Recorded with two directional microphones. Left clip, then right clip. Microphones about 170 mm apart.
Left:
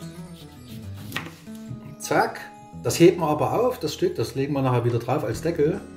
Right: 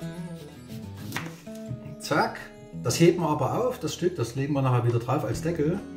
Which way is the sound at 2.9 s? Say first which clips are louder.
Left 4 dB; 25° left (ahead or behind).